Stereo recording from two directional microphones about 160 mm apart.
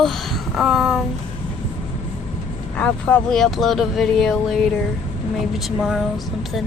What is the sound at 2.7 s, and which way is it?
Speech, 10° left (ahead or behind).